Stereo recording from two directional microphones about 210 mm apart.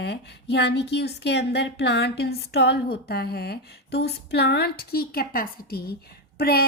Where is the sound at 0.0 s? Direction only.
50° left (ahead or behind).